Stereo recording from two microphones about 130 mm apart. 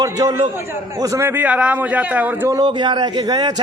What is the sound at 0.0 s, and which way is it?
A man's voice, 30° right (ahead or behind).